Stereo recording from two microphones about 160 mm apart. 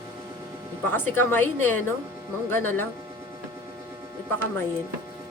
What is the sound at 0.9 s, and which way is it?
A woman's voice, 15° left (ahead or behind).